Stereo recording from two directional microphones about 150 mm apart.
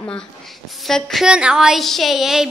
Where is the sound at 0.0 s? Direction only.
5° left (ahead or behind).